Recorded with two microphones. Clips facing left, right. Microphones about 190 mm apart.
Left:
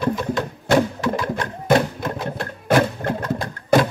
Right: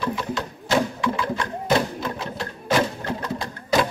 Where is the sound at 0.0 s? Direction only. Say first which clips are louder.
Left 5 dB; 50° left (ahead or behind).